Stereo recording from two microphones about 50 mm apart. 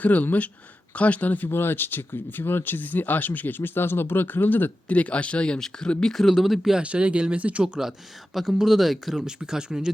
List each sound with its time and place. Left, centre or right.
0.0 s speech: left
1.5 s speech: left; by 6.7 s centre
6.7 s speech: right
7.6 s speech: centre